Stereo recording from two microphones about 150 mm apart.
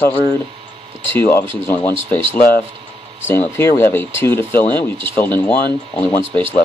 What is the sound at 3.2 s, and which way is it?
Speech, 15° left (ahead or behind).